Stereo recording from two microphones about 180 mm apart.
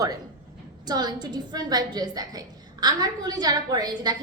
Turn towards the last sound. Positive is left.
turn(degrees=-20)  # may be behind; listen again after turning